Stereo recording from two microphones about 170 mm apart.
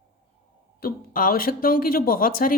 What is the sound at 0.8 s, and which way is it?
Speech, 60° left (ahead or behind).